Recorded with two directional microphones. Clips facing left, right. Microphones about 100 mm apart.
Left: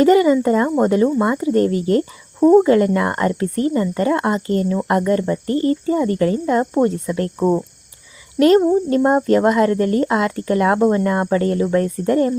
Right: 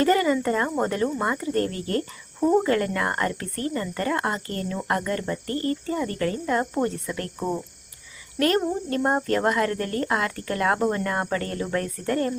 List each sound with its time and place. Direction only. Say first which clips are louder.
0.0 s speech: left 8 dB; 15° left (ahead or behind)
7.3 s speech: left 11 dB; 35° left (ahead or behind)
8.4 s speech: left 10 dB; 20° left (ahead or behind)